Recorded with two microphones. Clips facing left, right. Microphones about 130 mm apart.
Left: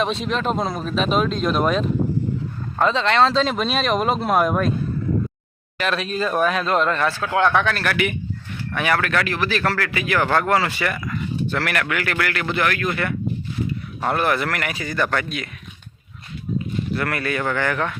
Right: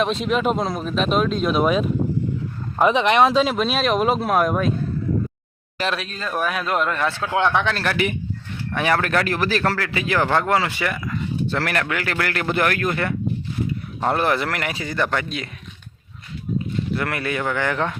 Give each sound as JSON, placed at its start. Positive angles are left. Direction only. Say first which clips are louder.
{"t": 0.0, "sound": "speech", "louder": "right 2 dB", "side_deg": 0}
{"t": 6.0, "sound": "speech", "louder": "left 5 dB", "side_deg": 5}
{"t": 7.1, "sound": "a man's voice", "louder": "left 1 dB", "side_deg": -20}
{"t": 9.7, "sound": "a man's voice", "louder": "even", "side_deg": -25}
{"t": 10.2, "sound": "speech", "louder": "left 2 dB", "side_deg": -20}
{"t": 11.4, "sound": "speech", "louder": "even", "side_deg": -30}
{"t": 14.0, "sound": "a man's voice", "louder": "right 1 dB", "side_deg": -25}
{"t": 16.9, "sound": "speech", "louder": "left 1 dB", "side_deg": -20}